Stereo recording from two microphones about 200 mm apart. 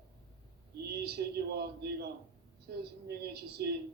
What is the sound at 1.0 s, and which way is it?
Speech, 55° right (ahead or behind).